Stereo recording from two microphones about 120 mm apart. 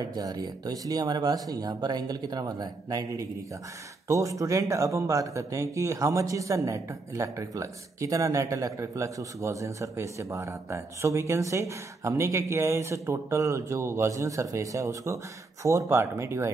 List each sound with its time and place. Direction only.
0.0 s speech: 35° right (ahead or behind)